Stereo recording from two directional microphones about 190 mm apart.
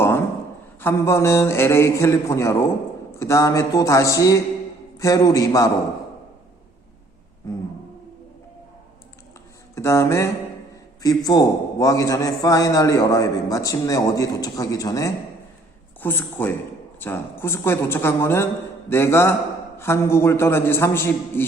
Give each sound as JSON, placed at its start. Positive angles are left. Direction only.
{"t": 0.8, "sound": "a man's voice", "side_deg": 15}
{"t": 9.7, "sound": "a man's voice", "side_deg": 15}